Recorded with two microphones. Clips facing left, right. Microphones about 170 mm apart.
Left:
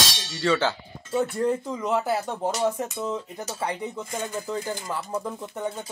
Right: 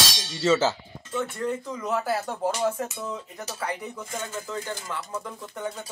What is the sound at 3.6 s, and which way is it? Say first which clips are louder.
Speech: left 2 dB; 25° left (ahead or behind).